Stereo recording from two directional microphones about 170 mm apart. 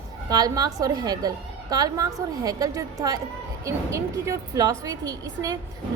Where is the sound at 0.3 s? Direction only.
20° right (ahead or behind).